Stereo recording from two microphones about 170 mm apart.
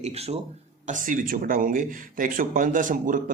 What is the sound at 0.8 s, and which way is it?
A man's voice, 50° right (ahead or behind).